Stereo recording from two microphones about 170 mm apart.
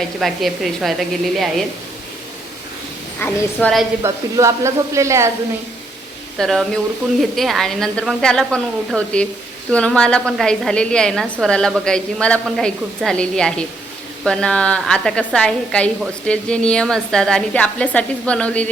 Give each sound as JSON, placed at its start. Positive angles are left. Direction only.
{"t": 0.2, "sound": "a woman's voice", "side_deg": 0}
{"t": 3.2, "sound": "a woman's voice", "side_deg": 10}
{"t": 4.0, "sound": "speech", "side_deg": -15}
{"t": 6.4, "sound": "a woman's voice", "side_deg": 5}